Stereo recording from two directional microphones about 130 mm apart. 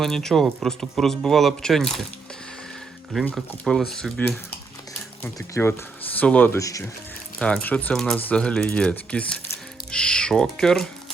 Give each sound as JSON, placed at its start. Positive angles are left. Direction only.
{"t": 0.0, "sound": "speech", "side_deg": 5}
{"t": 3.6, "sound": "speech", "side_deg": 5}
{"t": 5.2, "sound": "speech", "side_deg": 20}
{"t": 6.6, "sound": "speech", "side_deg": 25}
{"t": 7.3, "sound": "speech", "side_deg": 10}